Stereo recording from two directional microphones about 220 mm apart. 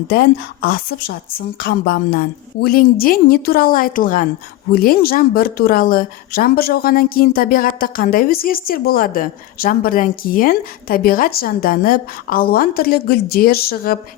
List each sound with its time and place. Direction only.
0.1 s a woman's voice: 45° left (ahead or behind)